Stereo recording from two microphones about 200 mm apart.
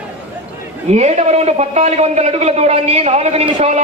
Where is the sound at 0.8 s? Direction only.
35° right (ahead or behind).